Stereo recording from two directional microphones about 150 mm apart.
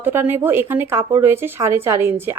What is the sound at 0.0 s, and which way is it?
A woman's voice, 15° right (ahead or behind).